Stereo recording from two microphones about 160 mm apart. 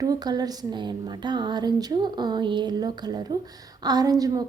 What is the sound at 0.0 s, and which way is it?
A woman's voice, 25° right (ahead or behind).